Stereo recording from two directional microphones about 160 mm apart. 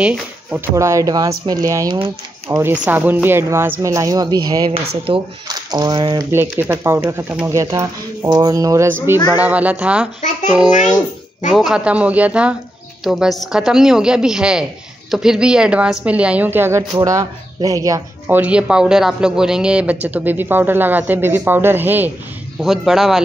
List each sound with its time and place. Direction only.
0.0 s speech: 5° right (ahead or behind)
0.7 s speech: 20° right (ahead or behind)
2.5 s a man's voice: 10° right (ahead or behind); by 6.2 s 30° right (ahead or behind)
6.3 s a man's voice: 15° right (ahead or behind)
11.5 s a man's voice: 5° right (ahead or behind); by 18.4 s 20° right (ahead or behind)
18.4 s a man's voice: 5° right (ahead or behind)
22.6 s a woman's voice: centre (ahead or behind)